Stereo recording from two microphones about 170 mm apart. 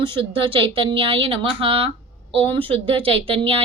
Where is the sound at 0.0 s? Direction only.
30° right (ahead or behind).